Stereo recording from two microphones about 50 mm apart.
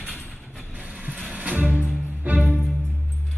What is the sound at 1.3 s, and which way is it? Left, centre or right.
Music, right.